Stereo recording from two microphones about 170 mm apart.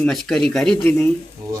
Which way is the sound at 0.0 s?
Centre (ahead or behind).